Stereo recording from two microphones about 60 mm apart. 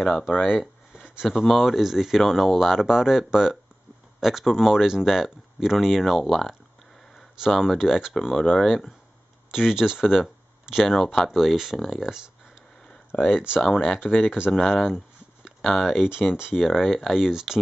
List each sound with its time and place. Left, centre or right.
0.9 s a sound: centre
1.4 s speech: centre
13.1 s speech: left
13.6 s speech: centre
14.0 s speech: left
14.5 s speech: centre